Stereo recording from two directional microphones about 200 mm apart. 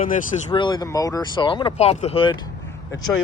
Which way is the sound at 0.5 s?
25° left (ahead or behind).